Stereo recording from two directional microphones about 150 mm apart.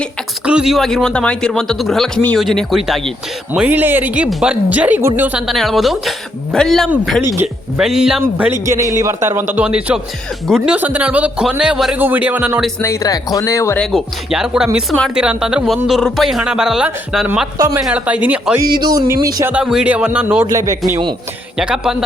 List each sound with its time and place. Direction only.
0.4 s speech: 5° right (ahead or behind)
5.5 s speech: centre (ahead or behind)
8.2 s speech: 15° right (ahead or behind)
12.8 s speech: 20° left (ahead or behind)
13.7 s speech: centre (ahead or behind)
18.8 s speech: 25° right (ahead or behind)
19.5 s speech: 5° right (ahead or behind); by 20.7 s 20° right (ahead or behind)
21.6 s speech: 5° right (ahead or behind)